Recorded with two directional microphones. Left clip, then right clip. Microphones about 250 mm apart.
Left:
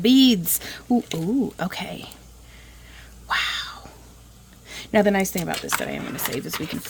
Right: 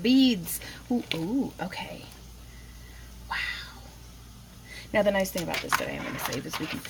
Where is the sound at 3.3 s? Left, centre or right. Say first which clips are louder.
Left 8 dB; left.